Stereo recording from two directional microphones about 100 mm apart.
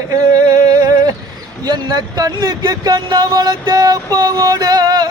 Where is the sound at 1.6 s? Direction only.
45° right (ahead or behind).